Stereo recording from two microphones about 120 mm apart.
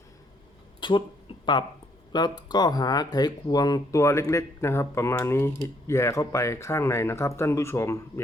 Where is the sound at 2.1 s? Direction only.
35° left (ahead or behind).